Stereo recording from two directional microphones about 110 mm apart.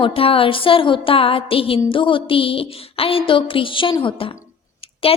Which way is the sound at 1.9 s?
50° left (ahead or behind).